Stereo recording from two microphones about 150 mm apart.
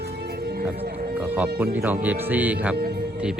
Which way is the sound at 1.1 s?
10° right (ahead or behind).